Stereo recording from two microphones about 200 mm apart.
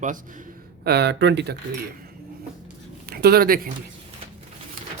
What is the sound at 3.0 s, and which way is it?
Speech, 50° right (ahead or behind).